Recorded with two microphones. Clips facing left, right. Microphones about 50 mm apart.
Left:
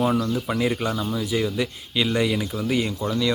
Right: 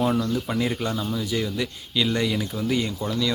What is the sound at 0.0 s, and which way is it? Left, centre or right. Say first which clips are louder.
Speech: left 1 dB; centre.